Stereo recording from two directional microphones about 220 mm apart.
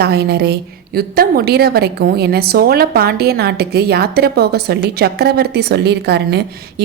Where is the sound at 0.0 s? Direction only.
45° right (ahead or behind).